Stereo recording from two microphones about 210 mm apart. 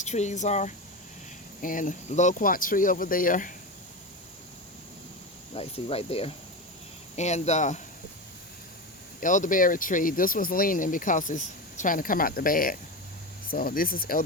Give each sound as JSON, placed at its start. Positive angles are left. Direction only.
{"t": 0.0, "sound": "speech", "side_deg": 35}
{"t": 5.5, "sound": "speech", "side_deg": 30}
{"t": 9.2, "sound": "speech", "side_deg": 40}